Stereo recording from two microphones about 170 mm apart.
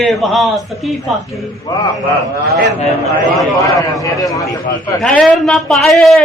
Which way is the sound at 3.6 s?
20° left (ahead or behind).